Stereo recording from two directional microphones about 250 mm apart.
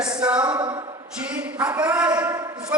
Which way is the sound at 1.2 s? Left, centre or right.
Centre.